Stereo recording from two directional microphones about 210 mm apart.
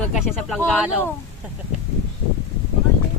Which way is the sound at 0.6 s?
5° left (ahead or behind).